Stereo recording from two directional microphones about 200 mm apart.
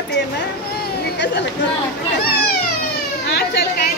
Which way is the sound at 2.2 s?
50° left (ahead or behind).